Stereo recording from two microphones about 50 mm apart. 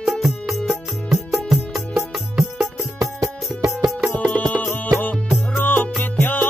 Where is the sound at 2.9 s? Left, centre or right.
Right.